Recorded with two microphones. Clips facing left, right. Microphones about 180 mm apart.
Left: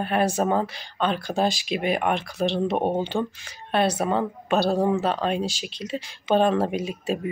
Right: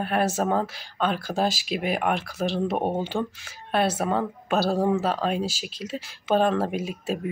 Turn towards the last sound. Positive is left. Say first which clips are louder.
# left 2 dB
turn(degrees=0)  # may be behind; listen again after turning